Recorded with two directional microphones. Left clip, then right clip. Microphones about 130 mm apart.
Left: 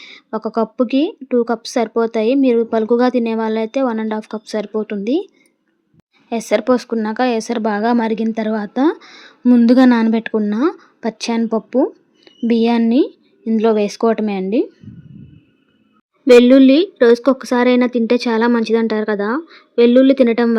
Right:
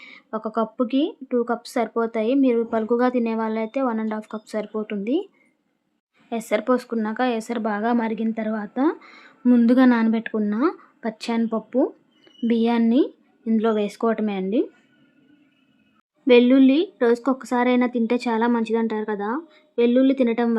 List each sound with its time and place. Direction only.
0.0 s speech: 30° left (ahead or behind)
9.4 s speech: 20° left (ahead or behind)
9.6 s speech: 35° left (ahead or behind)
12.9 s a sound: 30° left (ahead or behind)
13.6 s speech: 30° left (ahead or behind)
16.2 s speech: 35° left (ahead or behind)